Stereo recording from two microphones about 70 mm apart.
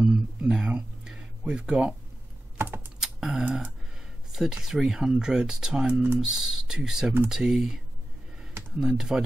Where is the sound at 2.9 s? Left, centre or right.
Centre.